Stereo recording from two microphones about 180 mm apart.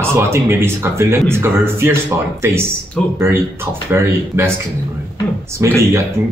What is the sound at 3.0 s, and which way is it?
Speech, 5° left (ahead or behind).